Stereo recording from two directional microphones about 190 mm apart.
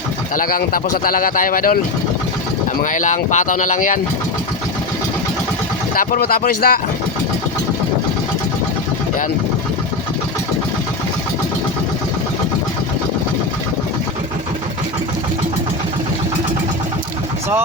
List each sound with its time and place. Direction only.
0.3 s speech: 50° left (ahead or behind)
2.8 s speech: 40° left (ahead or behind)
5.9 s speech: 50° left (ahead or behind)